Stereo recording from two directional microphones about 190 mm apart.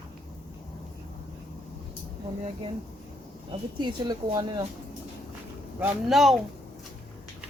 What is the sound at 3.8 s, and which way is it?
Speech, 20° right (ahead or behind).